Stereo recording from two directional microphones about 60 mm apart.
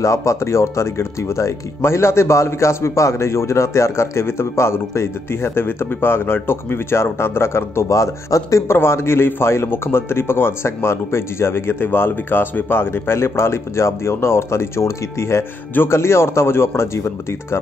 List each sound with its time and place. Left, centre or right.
0.0 s speech: left
8.7 s speech: left